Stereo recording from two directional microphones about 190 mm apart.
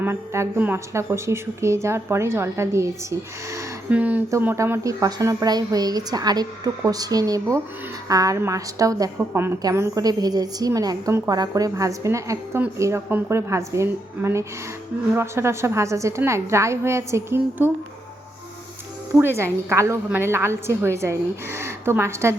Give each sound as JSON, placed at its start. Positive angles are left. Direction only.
{"t": 0.0, "sound": "a woman's voice", "side_deg": -10}
{"t": 19.1, "sound": "a woman's voice", "side_deg": -10}